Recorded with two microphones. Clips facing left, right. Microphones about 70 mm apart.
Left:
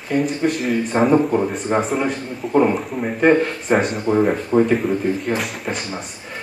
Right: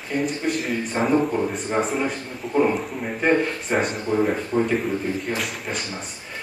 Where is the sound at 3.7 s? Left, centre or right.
Centre.